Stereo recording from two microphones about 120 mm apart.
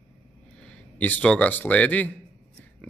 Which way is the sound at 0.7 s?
10° left (ahead or behind).